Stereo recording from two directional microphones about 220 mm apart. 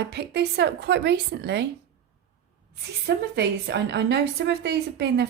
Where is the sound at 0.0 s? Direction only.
50° right (ahead or behind).